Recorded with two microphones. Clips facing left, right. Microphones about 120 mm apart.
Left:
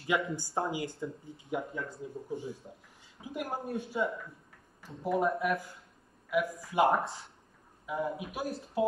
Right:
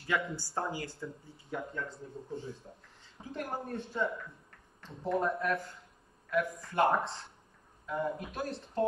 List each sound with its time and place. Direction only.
0.0 s speech: 20° left (ahead or behind)